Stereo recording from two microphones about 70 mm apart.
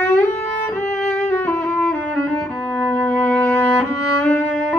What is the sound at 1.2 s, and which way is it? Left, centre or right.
Music, left.